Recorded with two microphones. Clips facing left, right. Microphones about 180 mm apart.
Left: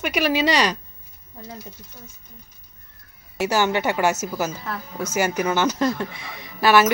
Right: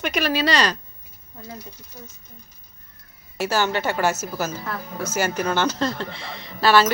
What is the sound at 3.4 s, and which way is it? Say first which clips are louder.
Speech: left 2 dB; 20° left (ahead or behind).